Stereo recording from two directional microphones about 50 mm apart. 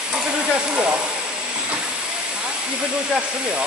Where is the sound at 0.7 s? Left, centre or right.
Right.